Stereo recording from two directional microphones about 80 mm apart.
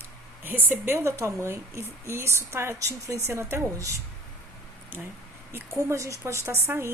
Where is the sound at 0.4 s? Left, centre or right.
Right.